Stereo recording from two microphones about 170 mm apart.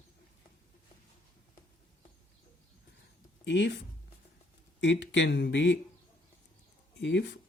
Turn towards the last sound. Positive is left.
turn(degrees=90)